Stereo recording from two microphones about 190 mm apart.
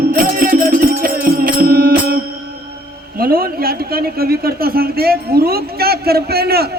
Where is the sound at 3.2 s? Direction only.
50° right (ahead or behind).